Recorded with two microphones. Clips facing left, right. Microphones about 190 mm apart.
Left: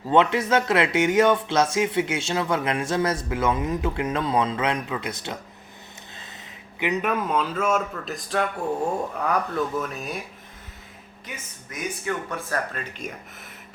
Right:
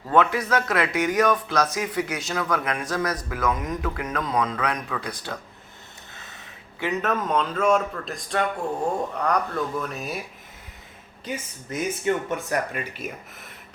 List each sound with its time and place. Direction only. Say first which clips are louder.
0.1 s speech: left 1 dB; 25° left (ahead or behind)
6.7 s a man's voice: left 1 dB; 15° left (ahead or behind); by 10.2 s centre (ahead or behind)
11.7 s speech: right 5 dB; 20° right (ahead or behind); by 13.5 s 5° right (ahead or behind)